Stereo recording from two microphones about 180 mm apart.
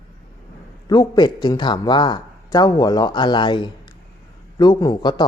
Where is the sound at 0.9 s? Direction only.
20° left (ahead or behind).